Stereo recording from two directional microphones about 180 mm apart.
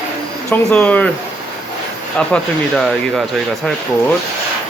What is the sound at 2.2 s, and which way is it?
Speech, 5° left (ahead or behind).